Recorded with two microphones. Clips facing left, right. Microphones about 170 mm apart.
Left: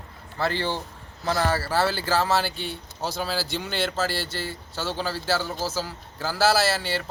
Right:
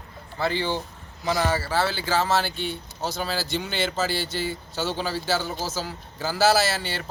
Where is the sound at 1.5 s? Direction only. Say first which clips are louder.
Even; 15° right (ahead or behind).